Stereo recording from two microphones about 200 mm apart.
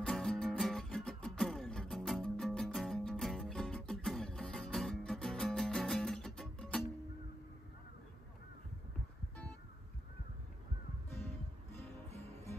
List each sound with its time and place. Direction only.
0.0 s music: 5° left (ahead or behind)
12.1 s music: 30° right (ahead or behind)